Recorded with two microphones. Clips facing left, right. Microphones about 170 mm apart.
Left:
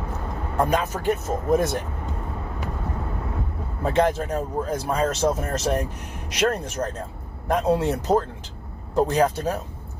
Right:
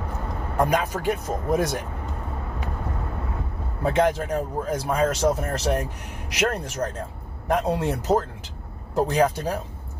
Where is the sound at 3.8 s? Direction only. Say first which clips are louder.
Even; 10° right (ahead or behind).